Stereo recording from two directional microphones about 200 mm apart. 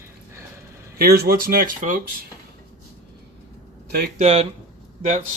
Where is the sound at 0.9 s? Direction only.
50° right (ahead or behind).